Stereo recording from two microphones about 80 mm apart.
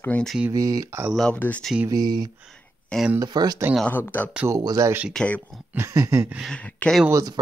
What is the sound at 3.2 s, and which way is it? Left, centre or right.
Speech, right.